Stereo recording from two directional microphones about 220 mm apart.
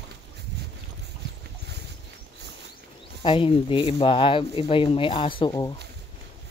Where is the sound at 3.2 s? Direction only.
25° left (ahead or behind).